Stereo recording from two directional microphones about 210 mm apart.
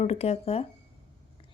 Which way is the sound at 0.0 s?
30° left (ahead or behind).